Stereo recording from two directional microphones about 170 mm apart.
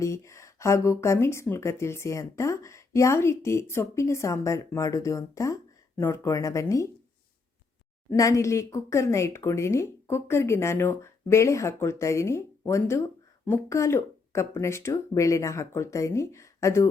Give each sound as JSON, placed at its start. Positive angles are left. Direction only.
{"t": 0.0, "sound": "speech", "side_deg": 15}
{"t": 8.1, "sound": "speech", "side_deg": 20}